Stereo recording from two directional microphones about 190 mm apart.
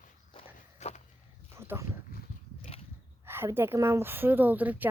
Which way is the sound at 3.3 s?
10° right (ahead or behind).